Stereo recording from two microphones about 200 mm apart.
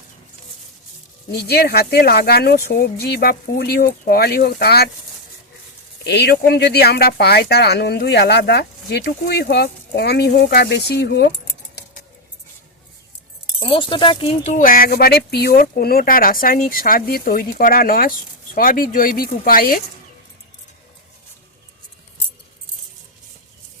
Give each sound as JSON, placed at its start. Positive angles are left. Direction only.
{"t": 1.3, "sound": "speech", "side_deg": 55}
{"t": 6.1, "sound": "speech", "side_deg": 55}
{"t": 13.6, "sound": "speech", "side_deg": 25}